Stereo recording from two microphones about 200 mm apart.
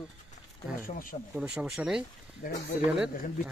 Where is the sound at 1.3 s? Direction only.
5° right (ahead or behind).